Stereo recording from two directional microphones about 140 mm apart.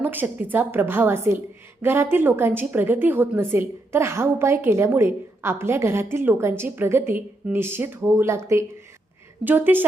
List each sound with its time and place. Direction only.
0.0 s a woman's voice: 15° right (ahead or behind)